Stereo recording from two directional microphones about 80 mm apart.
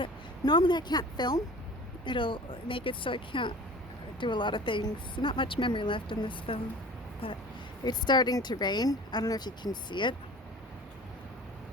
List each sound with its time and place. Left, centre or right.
0.0 s speech: left
2.0 s speech: left
7.9 s speech: left
9.9 s speech: left